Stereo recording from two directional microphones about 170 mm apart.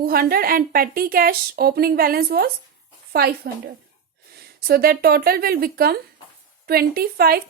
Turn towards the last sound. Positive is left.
turn(degrees=-65)  # may be behind; listen again after turning